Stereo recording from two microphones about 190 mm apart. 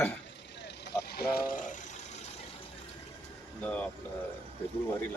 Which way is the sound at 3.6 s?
10° left (ahead or behind).